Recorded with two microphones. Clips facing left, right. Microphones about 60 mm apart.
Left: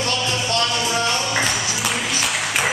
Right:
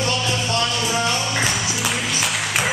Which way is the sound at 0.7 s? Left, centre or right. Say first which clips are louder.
Even; centre.